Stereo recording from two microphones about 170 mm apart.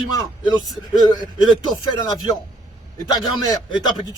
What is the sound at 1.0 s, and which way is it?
Speech, 25° left (ahead or behind).